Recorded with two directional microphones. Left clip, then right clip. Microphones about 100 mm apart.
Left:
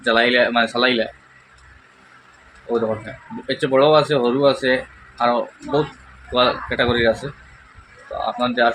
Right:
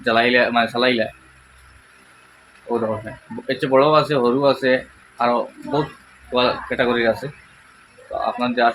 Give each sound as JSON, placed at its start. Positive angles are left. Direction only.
{"t": 0.0, "sound": "speech", "side_deg": -10}
{"t": 3.4, "sound": "speech", "side_deg": -15}
{"t": 8.2, "sound": "speech", "side_deg": -15}